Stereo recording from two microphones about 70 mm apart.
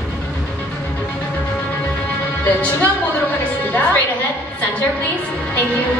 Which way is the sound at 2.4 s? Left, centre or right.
Left.